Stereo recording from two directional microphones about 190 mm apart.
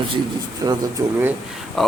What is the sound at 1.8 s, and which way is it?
Speech, centre (ahead or behind).